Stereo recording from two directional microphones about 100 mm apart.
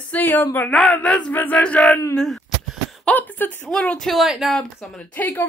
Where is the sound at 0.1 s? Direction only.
20° left (ahead or behind); by 2.4 s centre (ahead or behind).